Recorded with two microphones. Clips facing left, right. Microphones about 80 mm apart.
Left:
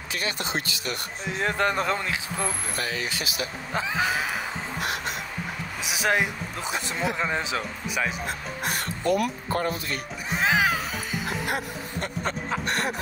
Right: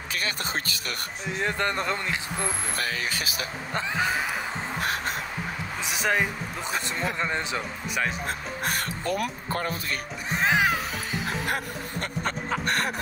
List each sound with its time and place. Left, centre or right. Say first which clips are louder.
0.1 s speech: left 1 dB; right
1.4 s speech: left 3 dB; centre
2.8 s speech: left 1 dB; right
3.7 s speech: left 1 dB; centre
4.8 s crow: right 1 dB; right
5.9 s speech: left 1 dB; centre
8.3 s speech: even; right
9.0 s speech: left 8 dB; left
10.3 s music: even; centre
11.4 s speech: even; right